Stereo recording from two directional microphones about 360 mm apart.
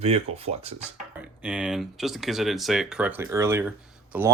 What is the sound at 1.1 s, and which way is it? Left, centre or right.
Speech, centre.